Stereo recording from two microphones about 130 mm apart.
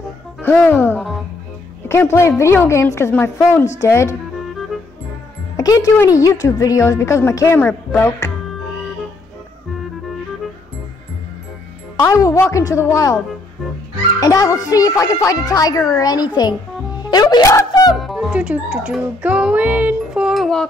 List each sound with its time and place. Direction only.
0.4 s speech: 10° left (ahead or behind)
1.9 s a woman's voice: 20° left (ahead or behind)
5.6 s a woman's voice: 25° left (ahead or behind)
12.0 s a woman's voice: 25° left (ahead or behind)
14.2 s a woman's voice: 25° left (ahead or behind)
17.9 s speech: centre (ahead or behind)